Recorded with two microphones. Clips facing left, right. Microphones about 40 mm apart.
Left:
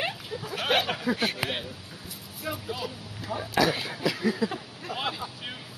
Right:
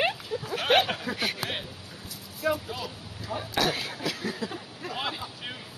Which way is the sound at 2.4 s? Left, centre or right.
Centre.